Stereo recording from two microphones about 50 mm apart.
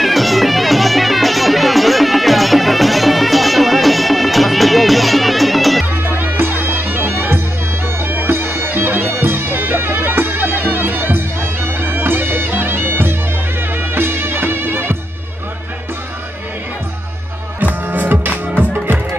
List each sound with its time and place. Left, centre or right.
0.0 s music: centre
5.9 s music: right
8.0 s bagpipes: right
13.6 s music: right
17.8 s music: right